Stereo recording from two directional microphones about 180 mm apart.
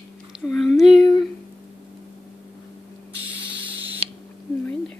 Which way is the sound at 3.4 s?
30° right (ahead or behind).